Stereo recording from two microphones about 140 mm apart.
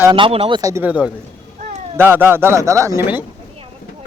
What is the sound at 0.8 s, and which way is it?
Speech, 10° right (ahead or behind).